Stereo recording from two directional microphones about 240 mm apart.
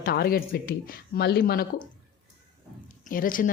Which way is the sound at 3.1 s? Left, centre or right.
Left.